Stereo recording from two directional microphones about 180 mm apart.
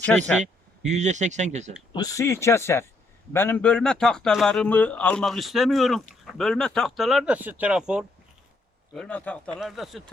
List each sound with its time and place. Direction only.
0.3 s a sound: centre (ahead or behind)
0.9 s speech: 40° right (ahead or behind)
1.9 s a man's voice: 20° left (ahead or behind); by 10.0 s centre (ahead or behind)